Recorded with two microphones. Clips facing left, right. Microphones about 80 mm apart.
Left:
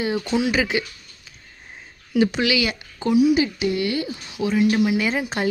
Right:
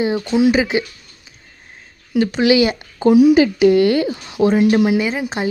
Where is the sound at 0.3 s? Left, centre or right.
Centre.